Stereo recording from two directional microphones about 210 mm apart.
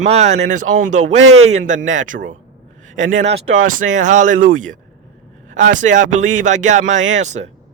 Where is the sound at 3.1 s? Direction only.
60° right (ahead or behind).